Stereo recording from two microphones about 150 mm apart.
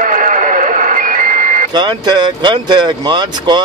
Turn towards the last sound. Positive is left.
turn(degrees=-30)  # may be behind; listen again after turning